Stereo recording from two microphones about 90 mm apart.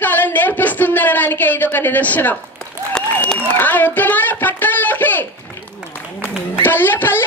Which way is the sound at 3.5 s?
20° left (ahead or behind).